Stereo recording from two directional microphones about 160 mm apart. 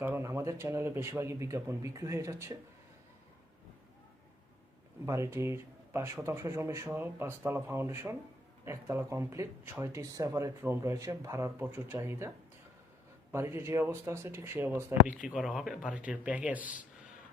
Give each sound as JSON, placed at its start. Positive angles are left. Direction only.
{"t": 0.0, "sound": "speech", "side_deg": -15}
{"t": 5.0, "sound": "speech", "side_deg": -15}
{"t": 13.3, "sound": "speech", "side_deg": -15}